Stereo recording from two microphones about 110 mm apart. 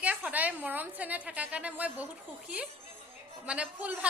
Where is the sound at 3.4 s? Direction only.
10° right (ahead or behind).